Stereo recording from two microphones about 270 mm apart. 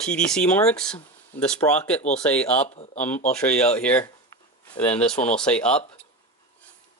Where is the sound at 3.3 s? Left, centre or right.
Centre.